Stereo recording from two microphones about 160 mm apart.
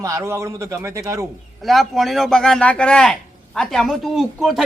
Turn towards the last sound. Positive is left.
turn(degrees=0)  # may be behind; listen again after turning